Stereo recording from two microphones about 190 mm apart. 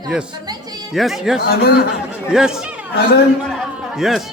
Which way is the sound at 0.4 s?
20° right (ahead or behind).